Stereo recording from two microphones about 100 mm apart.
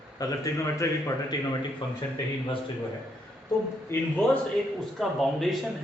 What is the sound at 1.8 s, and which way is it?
Speech, 45° left (ahead or behind).